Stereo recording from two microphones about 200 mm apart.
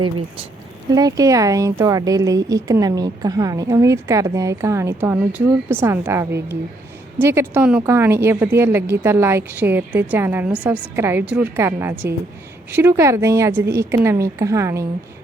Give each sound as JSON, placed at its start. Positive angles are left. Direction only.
{"t": 0.9, "sound": "speech", "side_deg": -20}